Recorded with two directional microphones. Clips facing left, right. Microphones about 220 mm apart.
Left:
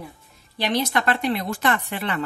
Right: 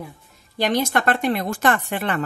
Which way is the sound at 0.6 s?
45° right (ahead or behind).